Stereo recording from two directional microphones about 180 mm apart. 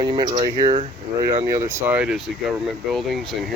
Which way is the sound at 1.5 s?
15° right (ahead or behind).